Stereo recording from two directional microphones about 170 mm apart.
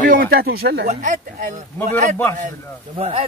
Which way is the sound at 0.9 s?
50° right (ahead or behind).